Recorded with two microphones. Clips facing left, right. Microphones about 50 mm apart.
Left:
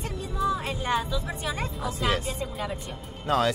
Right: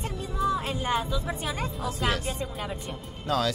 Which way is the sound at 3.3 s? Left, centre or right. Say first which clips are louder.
Left 3 dB; left.